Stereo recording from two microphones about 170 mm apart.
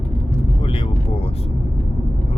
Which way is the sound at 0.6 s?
30° left (ahead or behind).